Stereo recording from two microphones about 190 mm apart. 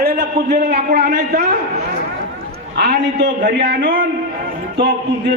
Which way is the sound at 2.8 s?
60° right (ahead or behind).